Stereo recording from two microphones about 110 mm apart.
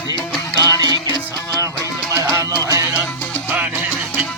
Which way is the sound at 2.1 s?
30° right (ahead or behind).